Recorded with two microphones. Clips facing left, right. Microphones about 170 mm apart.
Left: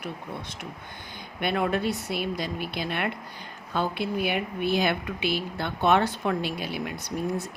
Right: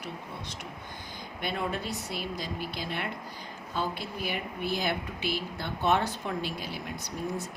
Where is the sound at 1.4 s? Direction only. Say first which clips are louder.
Left 7 dB; 65° left (ahead or behind).